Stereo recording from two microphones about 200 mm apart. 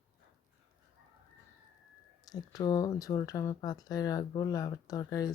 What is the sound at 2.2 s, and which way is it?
Speech, 20° left (ahead or behind).